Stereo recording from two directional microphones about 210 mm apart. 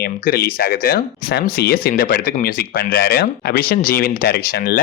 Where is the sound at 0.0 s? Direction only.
45° left (ahead or behind).